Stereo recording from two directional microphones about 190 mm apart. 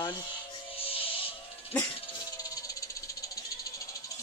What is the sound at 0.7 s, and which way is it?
Music, 30° left (ahead or behind).